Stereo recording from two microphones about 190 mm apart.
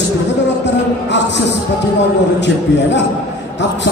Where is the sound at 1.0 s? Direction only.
70° left (ahead or behind).